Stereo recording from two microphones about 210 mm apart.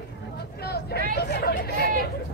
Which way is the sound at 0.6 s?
50° left (ahead or behind).